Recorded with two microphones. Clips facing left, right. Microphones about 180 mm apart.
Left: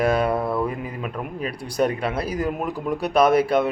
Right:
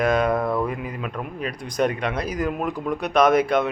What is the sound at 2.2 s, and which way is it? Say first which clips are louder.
Speech: left 1 dB; 30° left (ahead or behind).